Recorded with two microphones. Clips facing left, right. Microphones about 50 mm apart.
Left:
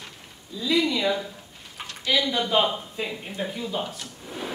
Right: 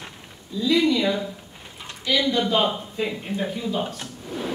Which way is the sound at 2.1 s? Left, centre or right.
Centre.